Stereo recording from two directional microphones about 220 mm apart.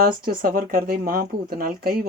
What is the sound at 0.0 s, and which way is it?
Speech, 40° right (ahead or behind).